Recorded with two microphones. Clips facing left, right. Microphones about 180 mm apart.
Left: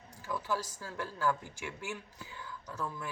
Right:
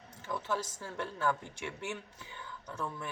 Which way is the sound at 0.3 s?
25° right (ahead or behind).